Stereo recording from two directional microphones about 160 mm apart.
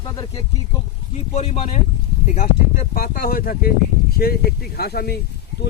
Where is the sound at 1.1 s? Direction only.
45° left (ahead or behind).